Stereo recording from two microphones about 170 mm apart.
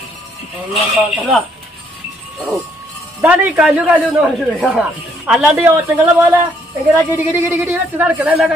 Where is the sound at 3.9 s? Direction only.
10° right (ahead or behind).